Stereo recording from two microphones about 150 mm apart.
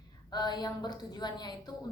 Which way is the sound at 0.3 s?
30° left (ahead or behind).